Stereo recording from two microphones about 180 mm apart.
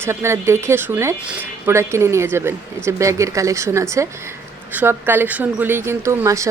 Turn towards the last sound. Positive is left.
turn(degrees=-15)  # may be behind; listen again after turning